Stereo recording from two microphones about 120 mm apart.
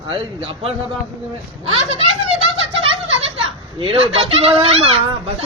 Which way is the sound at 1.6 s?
55° right (ahead or behind).